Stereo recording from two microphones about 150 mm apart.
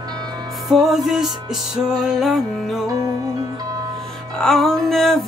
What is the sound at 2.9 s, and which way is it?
Music, 25° right (ahead or behind).